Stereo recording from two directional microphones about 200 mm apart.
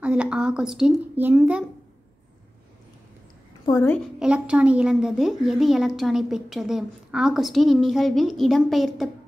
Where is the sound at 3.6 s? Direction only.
15° left (ahead or behind).